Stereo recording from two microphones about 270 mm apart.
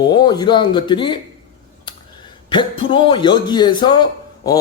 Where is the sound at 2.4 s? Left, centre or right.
Centre.